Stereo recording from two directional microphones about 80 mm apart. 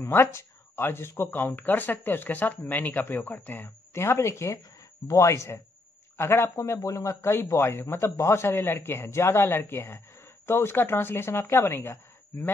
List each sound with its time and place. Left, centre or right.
0.0 s a man's voice: left